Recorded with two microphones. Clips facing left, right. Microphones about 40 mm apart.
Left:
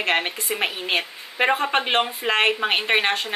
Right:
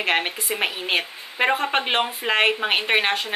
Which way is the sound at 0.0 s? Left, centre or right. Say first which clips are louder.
Even; centre.